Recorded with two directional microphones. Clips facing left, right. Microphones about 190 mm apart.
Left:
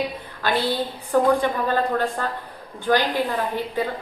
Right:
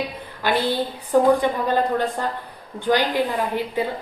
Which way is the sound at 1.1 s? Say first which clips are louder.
Right 2 dB; 15° right (ahead or behind).